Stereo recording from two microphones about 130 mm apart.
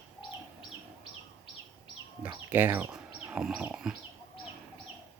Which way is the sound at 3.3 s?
5° right (ahead or behind).